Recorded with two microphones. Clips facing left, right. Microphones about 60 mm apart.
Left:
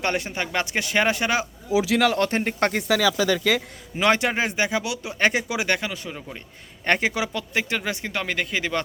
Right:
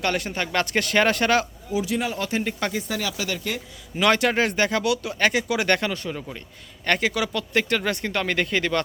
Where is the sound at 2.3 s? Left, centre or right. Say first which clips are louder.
Left 3 dB; left.